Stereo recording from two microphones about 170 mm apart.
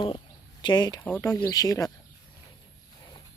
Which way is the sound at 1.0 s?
15° left (ahead or behind).